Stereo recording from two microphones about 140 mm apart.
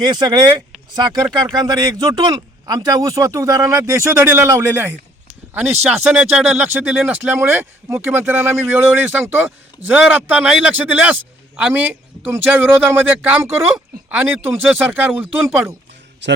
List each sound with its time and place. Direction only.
0.0 s a man's voice: 30° right (ahead or behind); by 6.1 s 15° right (ahead or behind)
6.3 s a man's voice: 5° right (ahead or behind)